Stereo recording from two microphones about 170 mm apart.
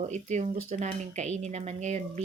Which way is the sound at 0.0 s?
45° right (ahead or behind).